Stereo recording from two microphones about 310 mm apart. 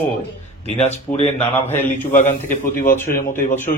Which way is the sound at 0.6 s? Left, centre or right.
Left.